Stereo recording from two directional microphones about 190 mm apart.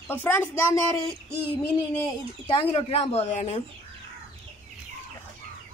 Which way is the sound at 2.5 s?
30° left (ahead or behind).